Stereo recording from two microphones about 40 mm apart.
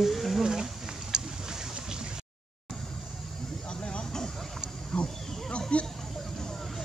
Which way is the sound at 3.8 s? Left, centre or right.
Left.